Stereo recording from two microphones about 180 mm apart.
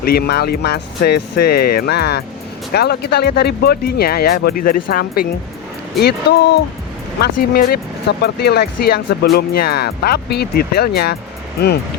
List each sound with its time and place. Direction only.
0.0 s speech: 60° left (ahead or behind)